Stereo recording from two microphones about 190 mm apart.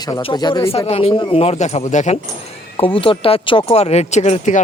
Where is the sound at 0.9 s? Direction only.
30° left (ahead or behind).